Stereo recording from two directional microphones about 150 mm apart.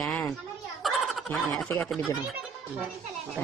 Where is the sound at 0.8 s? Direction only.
Centre (ahead or behind).